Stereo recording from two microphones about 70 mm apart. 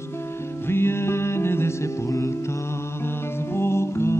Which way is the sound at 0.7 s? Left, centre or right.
Left.